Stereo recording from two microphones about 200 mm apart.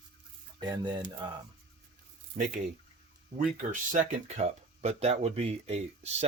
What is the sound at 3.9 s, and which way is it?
Speech, 35° right (ahead or behind).